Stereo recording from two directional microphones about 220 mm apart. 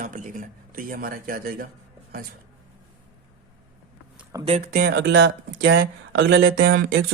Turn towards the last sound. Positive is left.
turn(degrees=-50)  # may be behind; listen again after turning